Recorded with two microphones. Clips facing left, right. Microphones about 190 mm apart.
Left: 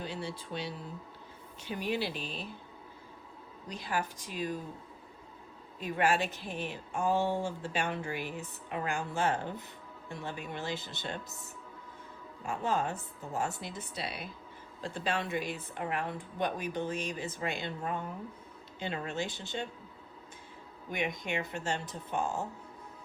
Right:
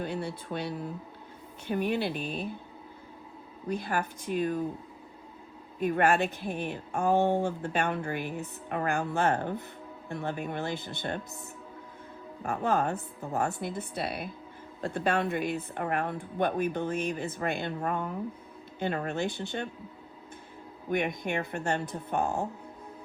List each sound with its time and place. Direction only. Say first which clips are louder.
0.0 s speech: right 5 dB; 55° right (ahead or behind)
3.7 s speech: right 5 dB; 55° right (ahead or behind)
5.8 s speech: right 5 dB; 55° right (ahead or behind)
12.4 s speech: right 4 dB; 55° right (ahead or behind)
20.9 s speech: right 5 dB; 55° right (ahead or behind)